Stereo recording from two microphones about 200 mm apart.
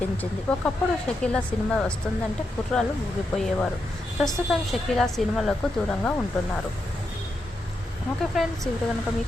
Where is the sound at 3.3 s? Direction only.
Centre (ahead or behind).